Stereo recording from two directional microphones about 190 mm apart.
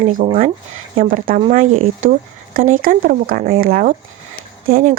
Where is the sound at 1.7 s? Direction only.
90° right.